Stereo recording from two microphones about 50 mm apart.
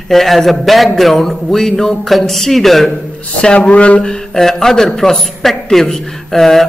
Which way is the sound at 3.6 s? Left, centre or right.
Left.